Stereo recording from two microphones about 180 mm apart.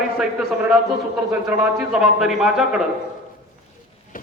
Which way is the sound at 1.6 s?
5° right (ahead or behind).